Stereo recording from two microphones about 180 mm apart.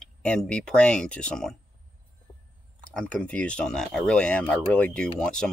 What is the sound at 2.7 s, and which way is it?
Speech, 5° left (ahead or behind).